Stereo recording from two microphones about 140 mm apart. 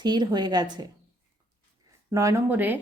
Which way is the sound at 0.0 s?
30° right (ahead or behind).